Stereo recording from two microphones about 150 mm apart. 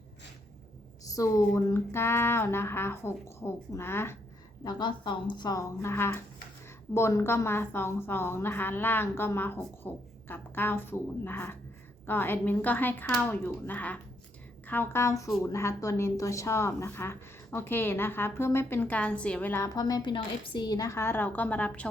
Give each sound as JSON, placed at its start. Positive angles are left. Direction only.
{"t": 1.0, "sound": "a woman's voice", "side_deg": 20}
{"t": 4.6, "sound": "a woman's voice", "side_deg": 30}